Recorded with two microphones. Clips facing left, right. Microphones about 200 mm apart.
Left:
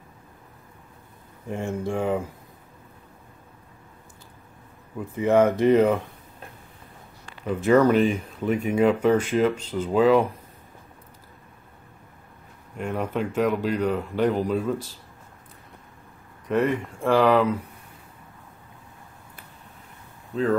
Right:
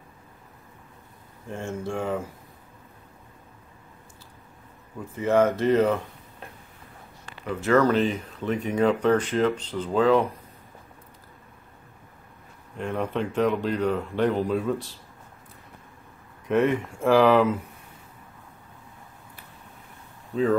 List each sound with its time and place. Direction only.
1.8 s speech: 15° left (ahead or behind)
5.1 s speech: 15° left (ahead or behind)
7.4 s speech: 15° left (ahead or behind)
12.7 s speech: centre (ahead or behind)
16.4 s speech: centre (ahead or behind)